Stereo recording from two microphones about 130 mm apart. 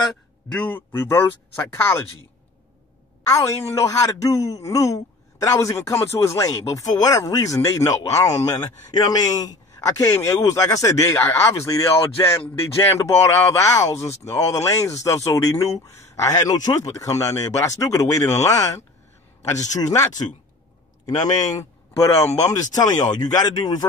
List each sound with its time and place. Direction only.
0.5 s speech: 10° left (ahead or behind)
3.3 s a man's voice: 25° left (ahead or behind)